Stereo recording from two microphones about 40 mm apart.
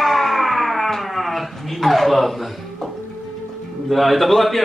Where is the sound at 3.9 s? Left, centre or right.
Centre.